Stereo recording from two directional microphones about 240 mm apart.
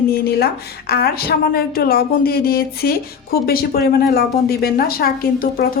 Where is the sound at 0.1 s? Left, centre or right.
Left.